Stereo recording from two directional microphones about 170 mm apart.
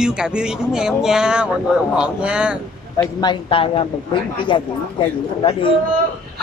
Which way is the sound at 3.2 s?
30° left (ahead or behind).